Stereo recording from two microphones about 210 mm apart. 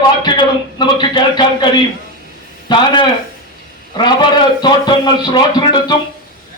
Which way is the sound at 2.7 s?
20° left (ahead or behind).